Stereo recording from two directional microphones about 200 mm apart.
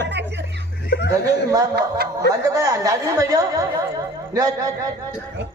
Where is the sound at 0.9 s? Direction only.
60° left (ahead or behind).